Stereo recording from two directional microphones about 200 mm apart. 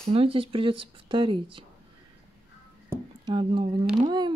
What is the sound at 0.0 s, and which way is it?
Speech, 30° right (ahead or behind).